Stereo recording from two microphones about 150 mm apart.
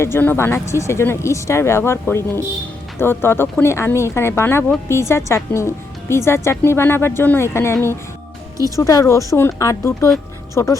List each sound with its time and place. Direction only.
0.0 s a woman's voice: 15° left (ahead or behind)